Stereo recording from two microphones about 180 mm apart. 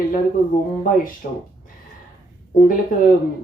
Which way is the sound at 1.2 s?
50° left (ahead or behind).